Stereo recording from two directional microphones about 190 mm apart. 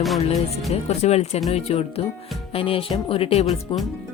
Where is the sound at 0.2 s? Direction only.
35° left (ahead or behind).